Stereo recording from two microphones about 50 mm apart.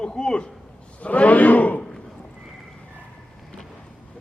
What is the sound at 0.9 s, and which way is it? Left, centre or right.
Speech, left.